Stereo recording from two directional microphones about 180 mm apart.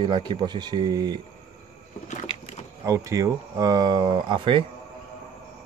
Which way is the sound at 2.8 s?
15° right (ahead or behind).